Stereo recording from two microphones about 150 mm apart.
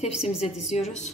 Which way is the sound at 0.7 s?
50° left (ahead or behind).